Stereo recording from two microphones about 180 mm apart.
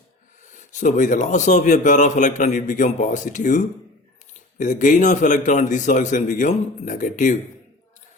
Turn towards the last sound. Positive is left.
turn(degrees=45)  # may be behind; listen again after turning